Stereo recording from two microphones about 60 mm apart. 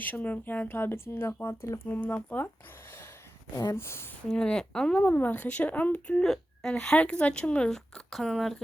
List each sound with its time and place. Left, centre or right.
0.0 s speech: left
1.9 s speech: left
3.8 s speech: left
4.3 s a woman's voice: centre
4.9 s speech: left
6.2 s a sound: centre
6.7 s speech: centre
7.7 s speech: centre